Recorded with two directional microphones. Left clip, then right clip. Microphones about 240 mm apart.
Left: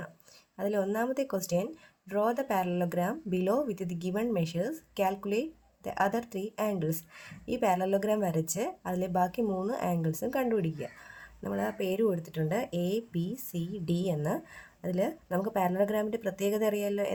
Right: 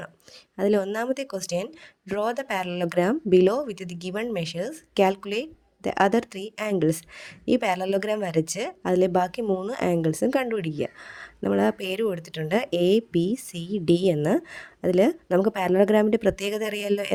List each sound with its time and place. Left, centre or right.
0.5 s speech: right